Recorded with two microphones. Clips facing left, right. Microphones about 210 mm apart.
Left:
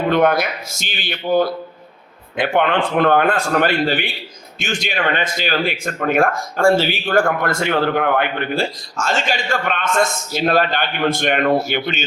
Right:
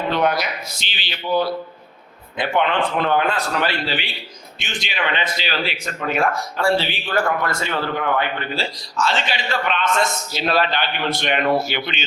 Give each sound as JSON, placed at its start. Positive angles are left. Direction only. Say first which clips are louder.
{"t": 0.1, "sound": "a man's voice", "louder": "left 5 dB", "side_deg": 50}